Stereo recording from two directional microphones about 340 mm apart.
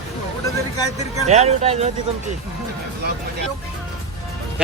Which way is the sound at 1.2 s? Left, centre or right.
Centre.